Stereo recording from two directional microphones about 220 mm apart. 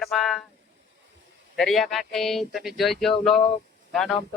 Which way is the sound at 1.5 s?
Centre (ahead or behind).